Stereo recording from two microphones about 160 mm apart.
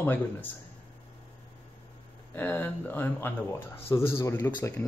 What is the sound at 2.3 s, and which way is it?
Speech, 10° left (ahead or behind).